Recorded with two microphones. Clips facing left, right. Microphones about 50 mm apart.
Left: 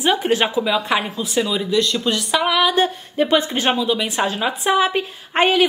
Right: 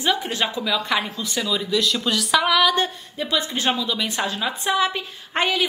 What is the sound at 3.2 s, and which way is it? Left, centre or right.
A woman's voice, left.